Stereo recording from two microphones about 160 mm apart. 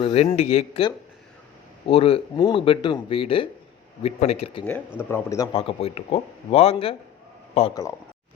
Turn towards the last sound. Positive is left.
turn(degrees=40)  # may be behind; listen again after turning